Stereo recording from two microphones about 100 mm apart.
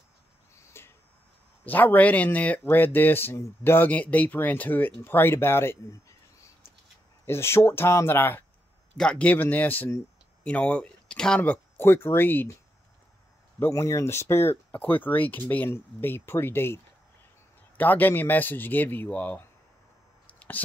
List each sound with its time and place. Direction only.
0.6 s a sound: 25° left (ahead or behind)
1.7 s speech: 20° left (ahead or behind)
7.2 s speech: 25° left (ahead or behind)
8.9 s speech: 10° left (ahead or behind)
10.4 s speech: 10° left (ahead or behind)
13.6 s speech: 30° left (ahead or behind); by 19.4 s 15° left (ahead or behind)
20.2 s clicking: 15° left (ahead or behind)